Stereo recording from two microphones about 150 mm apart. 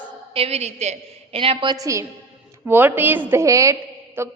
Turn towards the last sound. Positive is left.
turn(degrees=-15)  # may be behind; listen again after turning